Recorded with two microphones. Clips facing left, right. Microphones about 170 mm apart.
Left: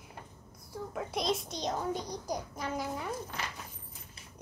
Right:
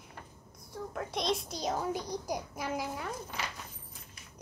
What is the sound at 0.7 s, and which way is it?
A child's voice, 5° left (ahead or behind).